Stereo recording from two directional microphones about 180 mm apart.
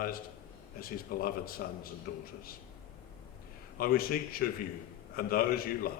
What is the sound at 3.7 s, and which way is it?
A man's voice, 55° left (ahead or behind).